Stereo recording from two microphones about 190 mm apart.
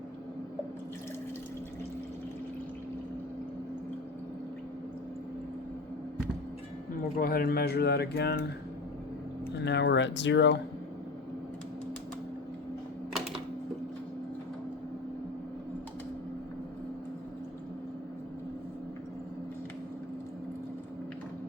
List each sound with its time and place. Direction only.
7.2 s speech: 50° left (ahead or behind)
9.6 s speech: 65° left (ahead or behind)